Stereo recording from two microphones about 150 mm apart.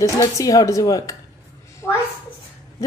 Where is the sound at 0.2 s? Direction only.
25° left (ahead or behind).